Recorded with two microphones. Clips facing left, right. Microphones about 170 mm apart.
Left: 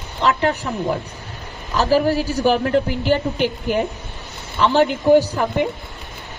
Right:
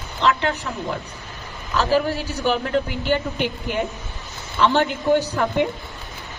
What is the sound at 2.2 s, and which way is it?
Speech, 40° left (ahead or behind).